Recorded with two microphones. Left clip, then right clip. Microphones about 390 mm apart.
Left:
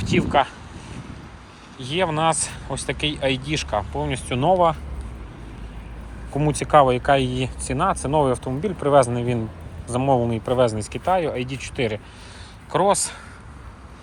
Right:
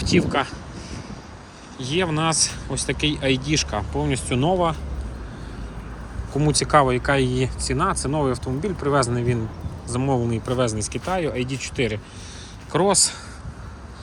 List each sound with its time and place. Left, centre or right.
0.0 s speech: centre
1.8 s speech: centre
6.3 s speech: centre
7.2 s speech: centre
7.7 s speech: centre
9.1 s speech: centre
9.9 s speech: centre